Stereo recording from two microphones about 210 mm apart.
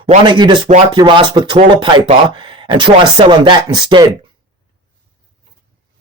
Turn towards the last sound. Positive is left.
turn(degrees=-20)  # may be behind; listen again after turning